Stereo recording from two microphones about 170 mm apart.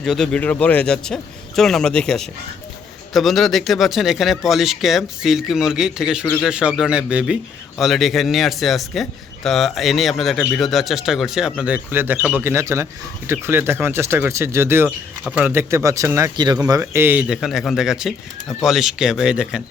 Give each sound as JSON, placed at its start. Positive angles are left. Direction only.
{"t": 0.0, "sound": "speech", "side_deg": 0}